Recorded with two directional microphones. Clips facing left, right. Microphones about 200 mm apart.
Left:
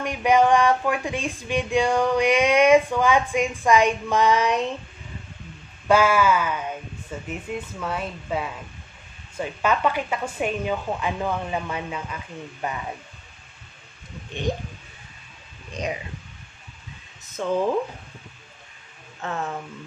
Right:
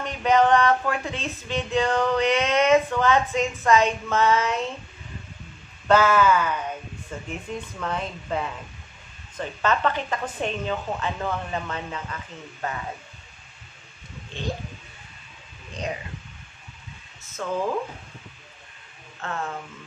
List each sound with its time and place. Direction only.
0.0 s speech: 10° left (ahead or behind)
5.9 s speech: 10° left (ahead or behind)
17.4 s speech: 20° left (ahead or behind)
19.2 s speech: 15° left (ahead or behind)